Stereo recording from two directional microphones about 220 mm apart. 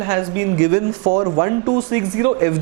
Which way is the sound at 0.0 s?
20° right (ahead or behind).